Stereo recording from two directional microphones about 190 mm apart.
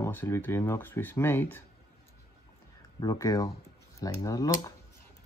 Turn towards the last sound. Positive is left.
turn(degrees=20)  # may be behind; listen again after turning